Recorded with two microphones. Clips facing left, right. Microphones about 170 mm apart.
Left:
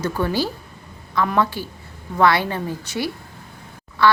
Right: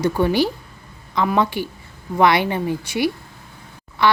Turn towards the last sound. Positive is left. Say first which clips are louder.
# left 1 dB
turn(degrees=-15)  # may be behind; listen again after turning